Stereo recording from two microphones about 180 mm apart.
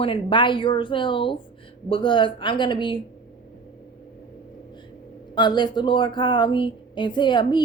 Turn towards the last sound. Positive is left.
turn(degrees=25)  # may be behind; listen again after turning